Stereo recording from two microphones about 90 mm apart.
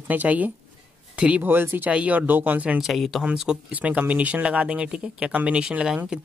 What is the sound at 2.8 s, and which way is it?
Speech, centre (ahead or behind).